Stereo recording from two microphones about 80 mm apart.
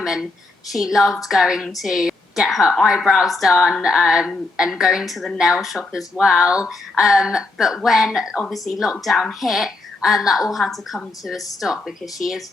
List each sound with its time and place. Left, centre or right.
0.0 s a woman's voice: centre